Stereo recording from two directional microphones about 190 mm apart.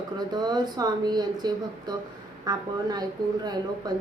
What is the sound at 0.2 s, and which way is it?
Speech, 20° right (ahead or behind).